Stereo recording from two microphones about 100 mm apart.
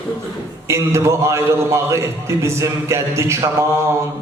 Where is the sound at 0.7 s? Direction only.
30° right (ahead or behind).